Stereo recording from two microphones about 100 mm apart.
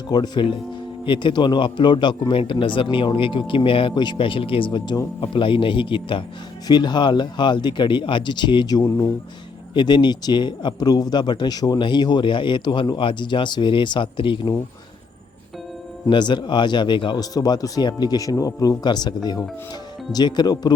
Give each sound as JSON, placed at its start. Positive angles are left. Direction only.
{"t": 0.1, "sound": "speech", "side_deg": 50}
{"t": 6.7, "sound": "speech", "side_deg": 45}
{"t": 9.7, "sound": "speech", "side_deg": 50}
{"t": 16.0, "sound": "speech", "side_deg": 50}
{"t": 17.3, "sound": "speech", "side_deg": 40}